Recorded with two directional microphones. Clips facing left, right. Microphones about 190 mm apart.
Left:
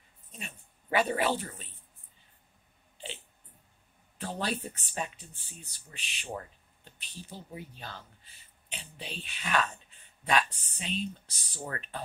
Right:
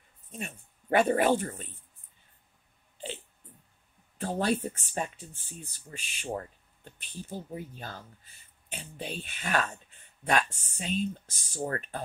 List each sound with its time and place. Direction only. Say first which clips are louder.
0.3 s speech: right 6 dB; 50° right (ahead or behind)
4.2 s speech: right 6 dB; 45° right (ahead or behind)